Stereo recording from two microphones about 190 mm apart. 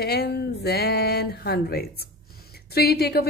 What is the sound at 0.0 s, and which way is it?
Speech, 55° left (ahead or behind).